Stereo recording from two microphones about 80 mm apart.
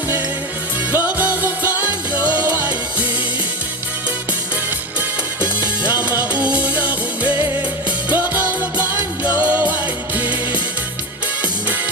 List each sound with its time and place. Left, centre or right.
0.9 s music: right
5.8 s music: right